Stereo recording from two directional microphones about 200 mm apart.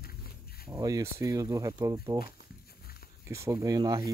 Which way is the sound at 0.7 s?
15° right (ahead or behind).